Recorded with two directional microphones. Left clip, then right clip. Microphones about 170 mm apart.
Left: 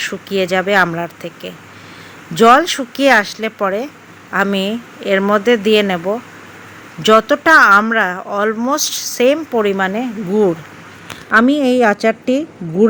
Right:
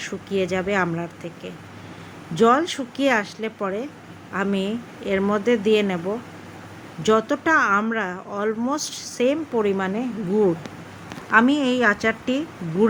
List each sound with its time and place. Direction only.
0.0 s a woman's voice: 25° left (ahead or behind)